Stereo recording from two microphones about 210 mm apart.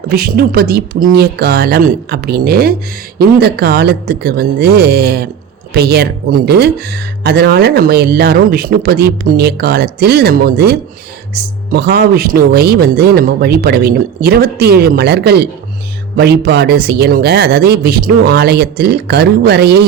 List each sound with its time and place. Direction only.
0.1 s speech: 45° right (ahead or behind)